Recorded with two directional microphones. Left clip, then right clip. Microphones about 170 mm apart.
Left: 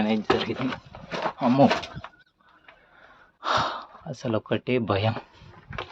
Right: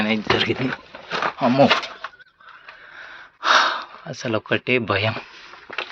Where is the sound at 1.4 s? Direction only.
5° left (ahead or behind).